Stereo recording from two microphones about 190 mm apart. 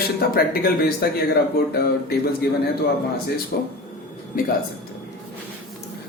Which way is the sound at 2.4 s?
55° left (ahead or behind).